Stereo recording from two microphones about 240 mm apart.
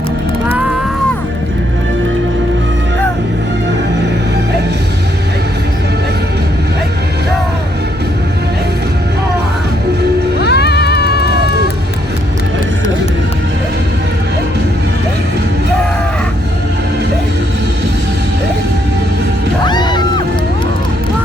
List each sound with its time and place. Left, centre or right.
10.4 s music: left
19.6 s music: centre